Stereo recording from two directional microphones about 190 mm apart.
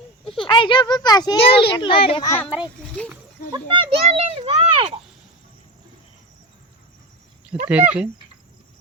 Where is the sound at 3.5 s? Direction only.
25° right (ahead or behind).